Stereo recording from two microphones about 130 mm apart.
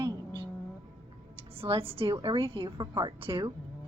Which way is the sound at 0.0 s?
35° right (ahead or behind).